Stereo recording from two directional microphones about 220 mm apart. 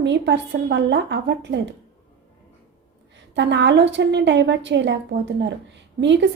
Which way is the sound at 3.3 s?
55° right (ahead or behind).